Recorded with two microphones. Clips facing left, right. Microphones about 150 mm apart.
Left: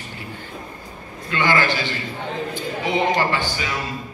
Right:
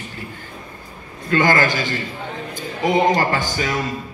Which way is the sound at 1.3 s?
45° right (ahead or behind).